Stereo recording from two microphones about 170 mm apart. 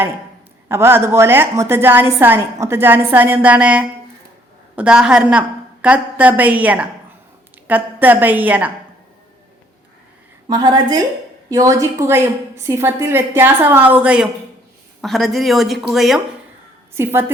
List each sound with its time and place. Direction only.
0.7 s a woman's voice: 15° right (ahead or behind)
10.5 s a woman's voice: 25° right (ahead or behind); by 16.2 s centre (ahead or behind)
16.9 s a woman's voice: 15° right (ahead or behind)